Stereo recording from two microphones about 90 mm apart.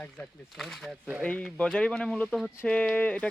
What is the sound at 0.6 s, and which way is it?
Speech, centre (ahead or behind).